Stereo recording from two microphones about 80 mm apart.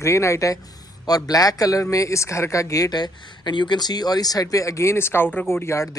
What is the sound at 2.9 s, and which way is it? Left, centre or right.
Speech, left.